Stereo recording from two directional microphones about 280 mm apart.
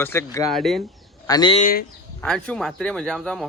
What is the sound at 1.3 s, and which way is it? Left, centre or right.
Speech, centre.